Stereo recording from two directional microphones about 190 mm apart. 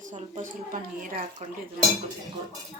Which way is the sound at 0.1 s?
45° right (ahead or behind).